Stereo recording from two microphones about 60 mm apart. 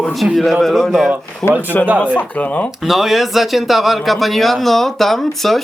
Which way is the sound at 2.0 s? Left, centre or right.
Left.